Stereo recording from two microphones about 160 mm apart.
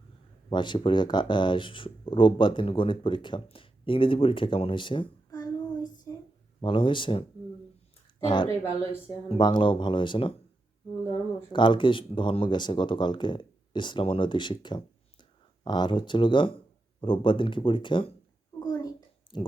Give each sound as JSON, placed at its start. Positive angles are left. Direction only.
{"t": 0.5, "sound": "speech", "side_deg": 30}
{"t": 8.3, "sound": "speech", "side_deg": 30}
{"t": 11.5, "sound": "speech", "side_deg": 30}
{"t": 18.6, "sound": "a sound", "side_deg": 25}